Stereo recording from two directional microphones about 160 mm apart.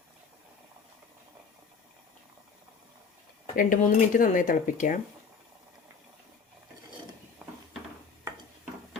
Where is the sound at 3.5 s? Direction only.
60° left (ahead or behind).